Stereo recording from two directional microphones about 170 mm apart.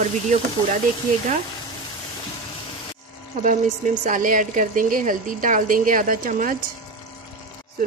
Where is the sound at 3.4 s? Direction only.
50° right (ahead or behind).